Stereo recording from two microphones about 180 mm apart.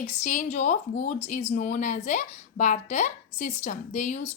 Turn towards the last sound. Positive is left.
turn(degrees=40)  # may be behind; listen again after turning